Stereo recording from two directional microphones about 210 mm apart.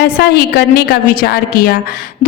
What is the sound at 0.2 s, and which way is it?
A woman's voice, 45° left (ahead or behind).